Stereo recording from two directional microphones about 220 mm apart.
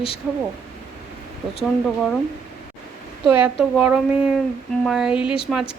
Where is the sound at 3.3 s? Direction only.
5° right (ahead or behind).